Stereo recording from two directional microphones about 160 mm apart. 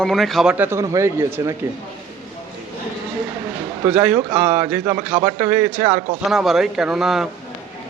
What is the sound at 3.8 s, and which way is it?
A man's voice, 10° right (ahead or behind).